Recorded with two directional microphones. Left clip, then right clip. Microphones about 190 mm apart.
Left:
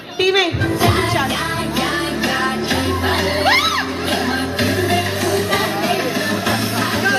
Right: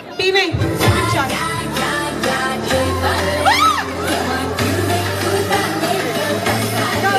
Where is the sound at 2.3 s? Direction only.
10° right (ahead or behind).